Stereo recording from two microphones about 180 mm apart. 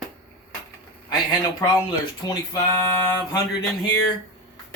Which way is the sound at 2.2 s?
15° left (ahead or behind).